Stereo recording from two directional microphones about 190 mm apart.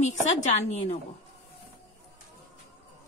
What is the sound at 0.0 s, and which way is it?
Speech, 35° left (ahead or behind).